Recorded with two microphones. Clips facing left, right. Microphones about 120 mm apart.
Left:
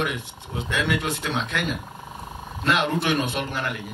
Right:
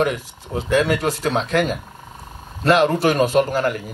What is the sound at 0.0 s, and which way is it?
A man's voice, 40° right (ahead or behind).